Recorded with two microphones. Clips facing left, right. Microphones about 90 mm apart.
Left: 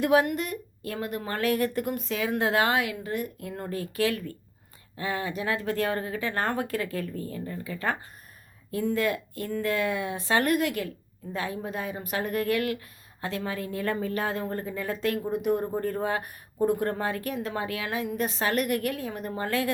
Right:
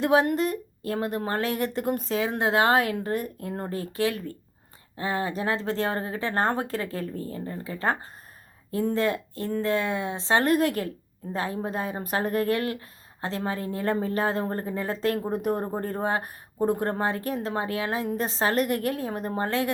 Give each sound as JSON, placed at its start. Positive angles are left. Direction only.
{"t": 0.0, "sound": "a woman's voice", "side_deg": -30}
{"t": 1.9, "sound": "a woman's voice", "side_deg": -35}
{"t": 2.6, "sound": "a woman's voice", "side_deg": -40}